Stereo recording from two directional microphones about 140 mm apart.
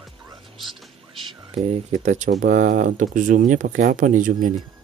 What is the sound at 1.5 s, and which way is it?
Speech, 50° right (ahead or behind).